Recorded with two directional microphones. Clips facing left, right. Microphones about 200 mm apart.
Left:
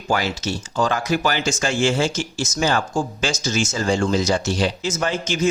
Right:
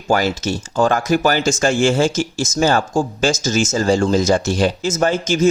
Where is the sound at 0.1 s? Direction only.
45° right (ahead or behind).